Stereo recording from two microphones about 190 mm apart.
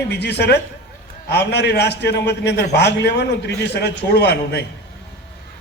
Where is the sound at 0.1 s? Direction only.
60° left (ahead or behind).